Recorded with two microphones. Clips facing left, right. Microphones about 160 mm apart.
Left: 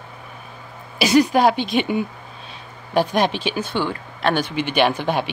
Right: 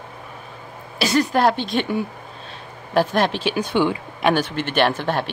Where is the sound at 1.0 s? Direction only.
10° left (ahead or behind).